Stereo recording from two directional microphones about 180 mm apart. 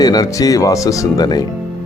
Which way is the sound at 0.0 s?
20° left (ahead or behind).